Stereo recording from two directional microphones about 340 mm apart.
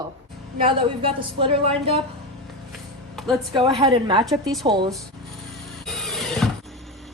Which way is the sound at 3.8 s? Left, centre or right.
Centre.